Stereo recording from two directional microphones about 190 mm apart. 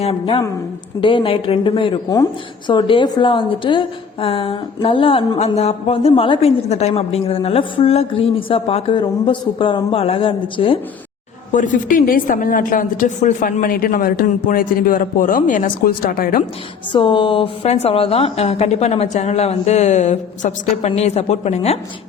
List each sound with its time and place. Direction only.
0.0 s a woman's voice: 30° left (ahead or behind)
11.5 s a woman's voice: 45° left (ahead or behind)
16.9 s a woman's voice: 25° left (ahead or behind)